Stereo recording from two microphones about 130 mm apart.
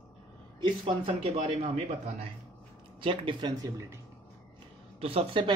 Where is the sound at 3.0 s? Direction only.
40° right (ahead or behind).